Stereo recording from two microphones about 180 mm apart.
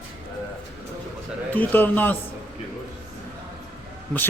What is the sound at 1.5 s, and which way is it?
Speech, 10° left (ahead or behind).